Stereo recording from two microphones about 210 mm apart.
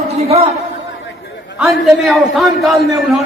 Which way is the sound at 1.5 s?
Centre (ahead or behind).